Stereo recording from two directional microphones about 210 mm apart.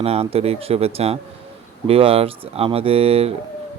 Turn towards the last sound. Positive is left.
turn(degrees=-30)  # may be behind; listen again after turning